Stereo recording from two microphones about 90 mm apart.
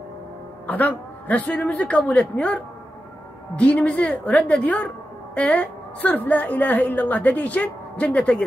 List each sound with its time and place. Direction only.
0.7 s a woman's voice: 20° left (ahead or behind)